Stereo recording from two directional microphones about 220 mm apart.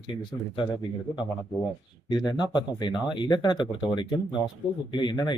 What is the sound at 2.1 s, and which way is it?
Speech, 20° left (ahead or behind).